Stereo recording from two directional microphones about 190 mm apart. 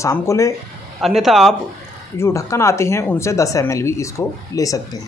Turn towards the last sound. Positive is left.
turn(degrees=20)  # may be behind; listen again after turning